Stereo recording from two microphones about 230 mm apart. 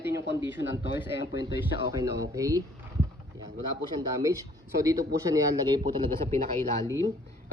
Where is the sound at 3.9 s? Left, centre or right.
Centre.